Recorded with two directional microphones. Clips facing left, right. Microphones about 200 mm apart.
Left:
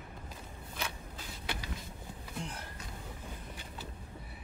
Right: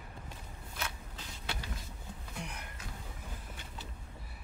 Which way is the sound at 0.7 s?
10° left (ahead or behind).